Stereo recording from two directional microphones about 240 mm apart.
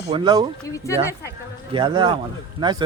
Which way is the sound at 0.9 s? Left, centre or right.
Centre.